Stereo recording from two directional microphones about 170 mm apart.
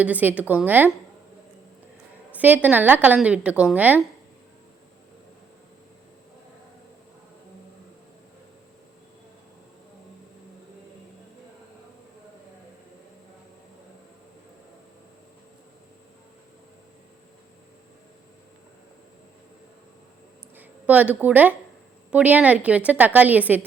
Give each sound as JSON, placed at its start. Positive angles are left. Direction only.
{"t": 0.0, "sound": "a woman's voice", "side_deg": -10}
{"t": 2.3, "sound": "a woman's voice", "side_deg": -10}
{"t": 20.6, "sound": "a woman's voice", "side_deg": -10}